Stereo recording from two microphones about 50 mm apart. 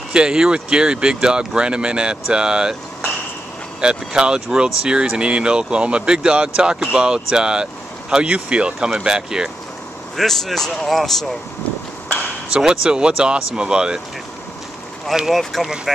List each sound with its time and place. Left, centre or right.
0.1 s speech: centre
3.8 s speech: centre
10.1 s speech: centre
12.5 s speech: centre
15.2 s speech: centre